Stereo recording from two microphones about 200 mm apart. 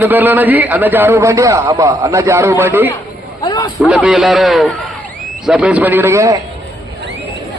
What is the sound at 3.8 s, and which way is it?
A man's voice, 5° right (ahead or behind).